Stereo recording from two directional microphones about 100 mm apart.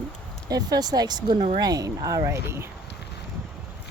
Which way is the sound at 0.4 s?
40° right (ahead or behind).